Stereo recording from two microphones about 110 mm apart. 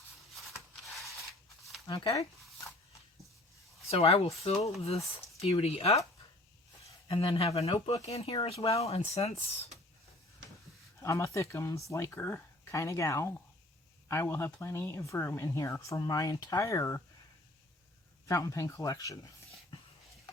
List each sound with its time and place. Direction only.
1.9 s speech: 45° left (ahead or behind)
3.8 s speech: 65° left (ahead or behind)
7.1 s speech: 55° left (ahead or behind)
11.0 s speech: 25° left (ahead or behind)
18.3 s speech: 30° left (ahead or behind)